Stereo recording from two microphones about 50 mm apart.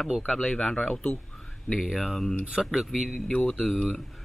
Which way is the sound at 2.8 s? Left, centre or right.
Centre.